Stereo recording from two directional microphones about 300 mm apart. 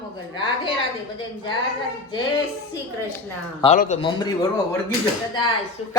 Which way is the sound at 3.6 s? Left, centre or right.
Left.